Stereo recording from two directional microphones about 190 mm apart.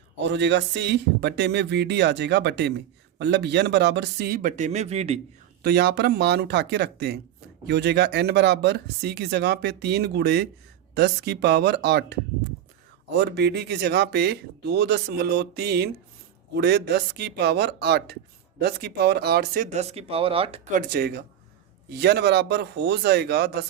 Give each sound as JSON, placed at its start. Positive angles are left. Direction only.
{"t": 0.2, "sound": "speech", "side_deg": -65}
{"t": 5.6, "sound": "speech", "side_deg": -60}
{"t": 20.7, "sound": "speech", "side_deg": -45}